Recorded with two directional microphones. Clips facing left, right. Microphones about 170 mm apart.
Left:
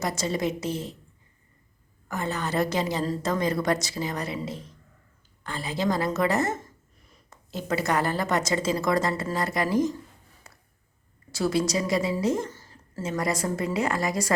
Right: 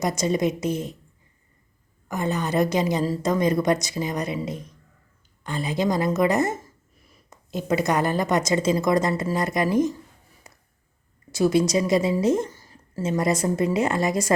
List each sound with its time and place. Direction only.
0.0 s a woman's voice: 20° right (ahead or behind)
2.0 s a woman's voice: 15° right (ahead or behind)
10.5 s a sound: 20° right (ahead or behind)
11.3 s a woman's voice: 20° right (ahead or behind)